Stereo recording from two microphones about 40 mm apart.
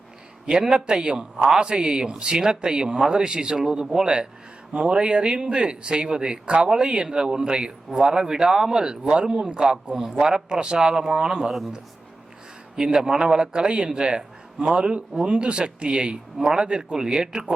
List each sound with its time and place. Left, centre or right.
0.6 s speech: centre
3.6 s speech: centre
12.7 s speech: centre